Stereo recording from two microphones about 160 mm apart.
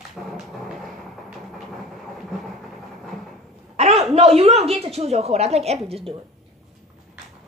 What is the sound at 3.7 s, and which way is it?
A woman's voice, 40° right (ahead or behind).